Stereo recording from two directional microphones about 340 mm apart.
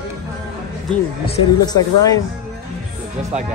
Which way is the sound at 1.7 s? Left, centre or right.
Centre.